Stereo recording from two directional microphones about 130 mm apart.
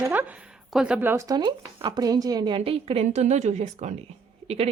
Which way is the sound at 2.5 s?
45° right (ahead or behind).